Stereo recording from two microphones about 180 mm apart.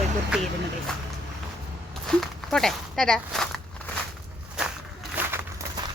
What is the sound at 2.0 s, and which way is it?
Speech, 5° left (ahead or behind).